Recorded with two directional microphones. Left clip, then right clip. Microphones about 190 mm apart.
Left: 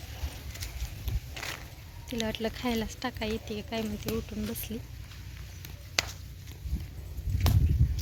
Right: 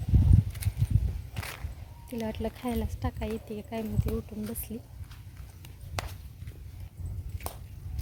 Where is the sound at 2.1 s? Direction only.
5° right (ahead or behind).